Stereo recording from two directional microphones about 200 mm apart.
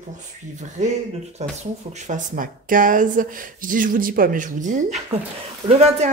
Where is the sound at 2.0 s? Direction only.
40° right (ahead or behind).